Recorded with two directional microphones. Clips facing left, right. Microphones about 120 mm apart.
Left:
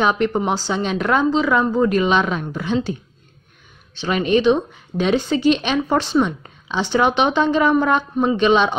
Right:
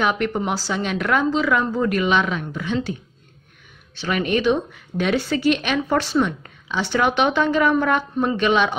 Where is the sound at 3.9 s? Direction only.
25° left (ahead or behind).